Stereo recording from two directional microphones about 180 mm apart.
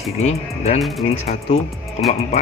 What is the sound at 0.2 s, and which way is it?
Speech, 35° left (ahead or behind).